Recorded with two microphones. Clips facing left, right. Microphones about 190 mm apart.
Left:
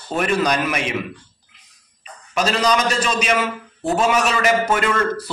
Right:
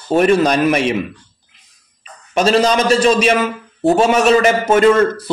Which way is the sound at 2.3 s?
25° right (ahead or behind).